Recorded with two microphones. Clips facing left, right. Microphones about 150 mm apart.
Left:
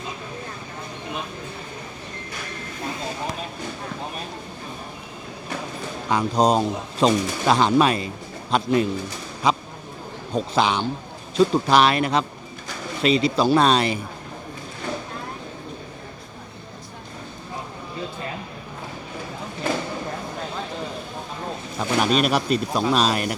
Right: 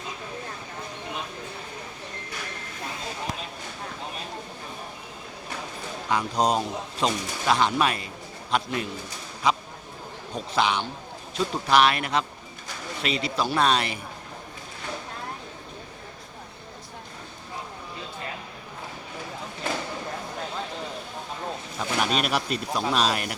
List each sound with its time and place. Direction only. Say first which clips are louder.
6.1 s speech: left 5 dB; 35° left (ahead or behind)
9.4 s a sound: left 3 dB; 35° left (ahead or behind)
10.5 s speech: left 2 dB; 35° left (ahead or behind)
21.8 s speech: left 6 dB; 40° left (ahead or behind)